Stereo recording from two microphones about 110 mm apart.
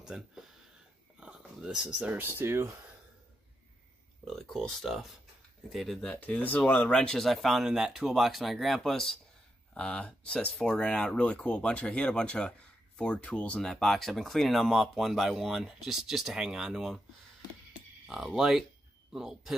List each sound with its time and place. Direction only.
0.0 s speech: 5° right (ahead or behind); by 2.7 s 20° right (ahead or behind)
4.2 s speech: 5° left (ahead or behind)
18.0 s speech: centre (ahead or behind)